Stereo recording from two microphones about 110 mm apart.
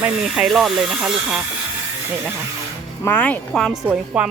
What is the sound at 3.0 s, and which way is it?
Speech, 15° left (ahead or behind).